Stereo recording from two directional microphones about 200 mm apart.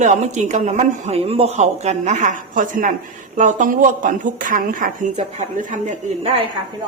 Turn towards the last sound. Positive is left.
turn(degrees=-35)  # may be behind; listen again after turning